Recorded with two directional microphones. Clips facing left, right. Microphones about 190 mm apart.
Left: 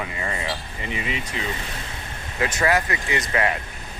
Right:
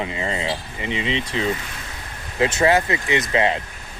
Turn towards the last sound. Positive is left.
turn(degrees=-25)  # may be behind; listen again after turning